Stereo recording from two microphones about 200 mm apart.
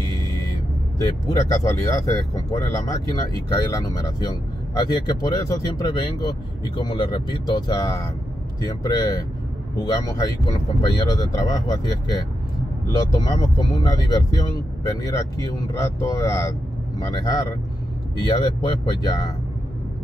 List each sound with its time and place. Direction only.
0.9 s speech: 20° left (ahead or behind)